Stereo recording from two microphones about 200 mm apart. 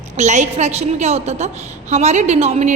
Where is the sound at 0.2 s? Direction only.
35° right (ahead or behind).